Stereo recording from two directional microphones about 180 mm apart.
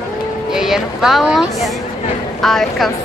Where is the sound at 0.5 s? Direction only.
5° right (ahead or behind).